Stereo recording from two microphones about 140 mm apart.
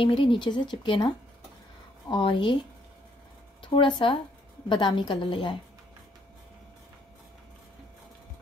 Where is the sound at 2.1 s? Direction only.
35° left (ahead or behind).